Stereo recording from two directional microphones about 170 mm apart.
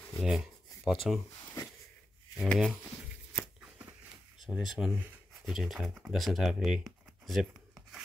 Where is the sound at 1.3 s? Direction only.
20° left (ahead or behind).